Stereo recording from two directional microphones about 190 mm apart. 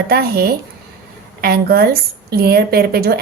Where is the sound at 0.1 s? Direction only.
55° right (ahead or behind).